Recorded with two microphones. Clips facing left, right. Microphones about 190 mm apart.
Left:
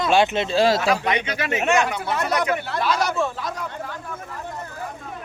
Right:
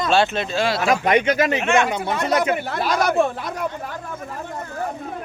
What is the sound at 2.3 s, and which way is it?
Speech, 25° right (ahead or behind).